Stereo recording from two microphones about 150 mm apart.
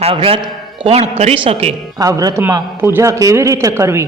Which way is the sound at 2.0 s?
25° right (ahead or behind).